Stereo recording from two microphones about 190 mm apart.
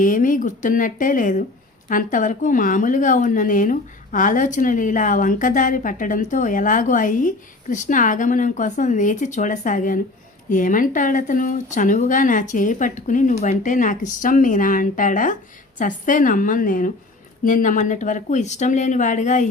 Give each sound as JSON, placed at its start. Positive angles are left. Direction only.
{"t": 0.0, "sound": "speech", "side_deg": 45}